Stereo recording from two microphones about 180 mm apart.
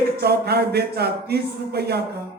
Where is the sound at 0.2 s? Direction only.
60° right (ahead or behind).